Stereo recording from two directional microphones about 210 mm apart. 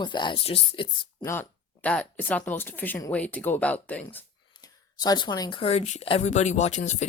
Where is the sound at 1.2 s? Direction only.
10° left (ahead or behind).